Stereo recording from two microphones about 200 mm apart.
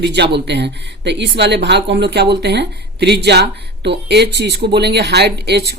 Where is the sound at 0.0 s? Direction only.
60° right (ahead or behind).